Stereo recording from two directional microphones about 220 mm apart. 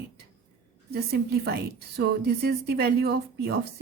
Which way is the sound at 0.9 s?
45° right (ahead or behind).